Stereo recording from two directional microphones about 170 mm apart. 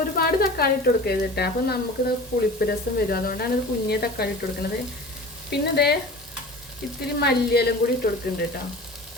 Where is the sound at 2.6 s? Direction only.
60° left (ahead or behind).